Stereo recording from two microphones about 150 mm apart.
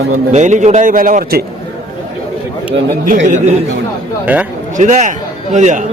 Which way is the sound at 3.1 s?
55° right (ahead or behind).